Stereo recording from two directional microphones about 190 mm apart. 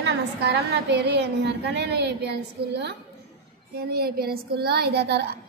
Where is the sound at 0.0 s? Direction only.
60° right (ahead or behind).